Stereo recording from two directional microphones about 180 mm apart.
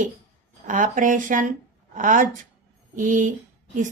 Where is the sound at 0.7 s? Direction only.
45° right (ahead or behind).